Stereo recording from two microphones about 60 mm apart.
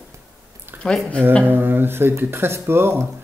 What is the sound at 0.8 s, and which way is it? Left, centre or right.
Speech, left.